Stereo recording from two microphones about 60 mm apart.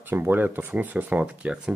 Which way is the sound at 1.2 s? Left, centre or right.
Centre.